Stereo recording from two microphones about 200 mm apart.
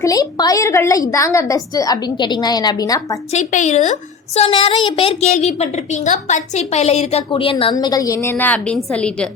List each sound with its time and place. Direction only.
0.0 s a woman's voice: 20° left (ahead or behind)
3.3 s a woman's voice: 35° left (ahead or behind); by 9.3 s 5° left (ahead or behind)